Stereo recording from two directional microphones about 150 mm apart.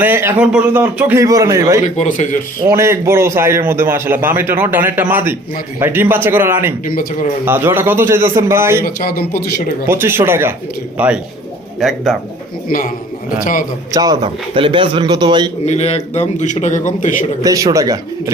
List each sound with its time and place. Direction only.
0.0 s a man's voice: 15° right (ahead or behind)
1.2 s speech: 20° right (ahead or behind)
1.8 s speech: 55° left (ahead or behind)
2.6 s a man's voice: 20° right (ahead or behind)
6.8 s speech: 70° left (ahead or behind)
7.4 s a man's voice: 15° right (ahead or behind)
8.8 s a man's voice: 85° left
9.8 s a man's voice: 15° right (ahead or behind); by 12.1 s centre (ahead or behind)
12.6 s speech: 70° left (ahead or behind)
13.9 s speech: 25° right (ahead or behind)
15.6 s a man's voice: 45° left (ahead or behind)
17.4 s speech: 25° right (ahead or behind)